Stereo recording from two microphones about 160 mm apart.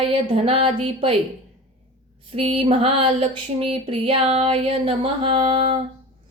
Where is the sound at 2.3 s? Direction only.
35° right (ahead or behind).